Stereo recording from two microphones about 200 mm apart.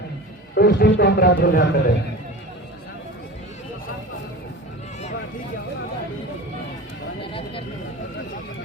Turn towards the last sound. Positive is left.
turn(degrees=25)  # may be behind; listen again after turning